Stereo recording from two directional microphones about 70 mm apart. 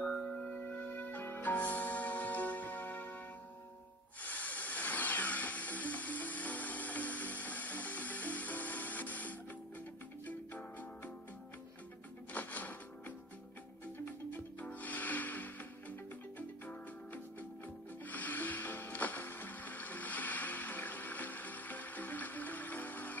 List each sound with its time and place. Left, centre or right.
0.0 s music: centre
4.2 s music: left
12.3 s music: left